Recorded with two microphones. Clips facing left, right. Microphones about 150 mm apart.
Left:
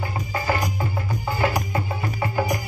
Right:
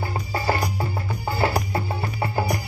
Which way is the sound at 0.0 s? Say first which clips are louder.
Right 1 dB; 35° right (ahead or behind).